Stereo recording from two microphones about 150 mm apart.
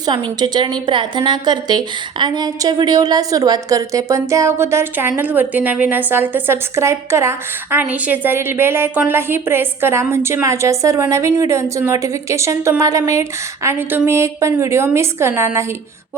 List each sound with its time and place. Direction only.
0.3 s a woman's voice: 30° right (ahead or behind)